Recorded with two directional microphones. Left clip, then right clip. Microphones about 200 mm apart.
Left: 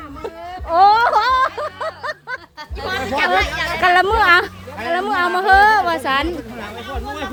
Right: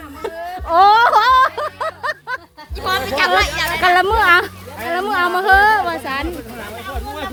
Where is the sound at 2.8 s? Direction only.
65° right (ahead or behind).